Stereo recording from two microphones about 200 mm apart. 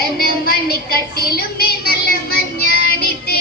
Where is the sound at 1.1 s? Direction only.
50° left (ahead or behind).